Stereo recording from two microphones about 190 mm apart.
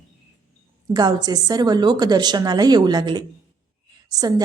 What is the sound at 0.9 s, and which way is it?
Speech, 20° right (ahead or behind).